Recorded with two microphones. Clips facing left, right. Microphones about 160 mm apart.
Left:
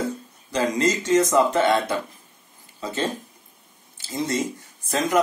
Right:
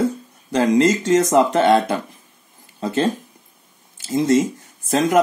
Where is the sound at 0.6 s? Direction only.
50° right (ahead or behind).